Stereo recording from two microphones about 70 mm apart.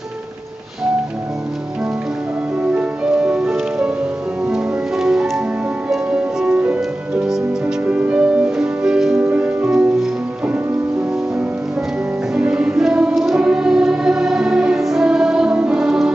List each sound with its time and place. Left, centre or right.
2.6 s music: centre
12.4 s music: centre